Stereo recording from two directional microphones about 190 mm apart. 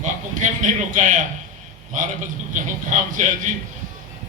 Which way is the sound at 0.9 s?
40° right (ahead or behind).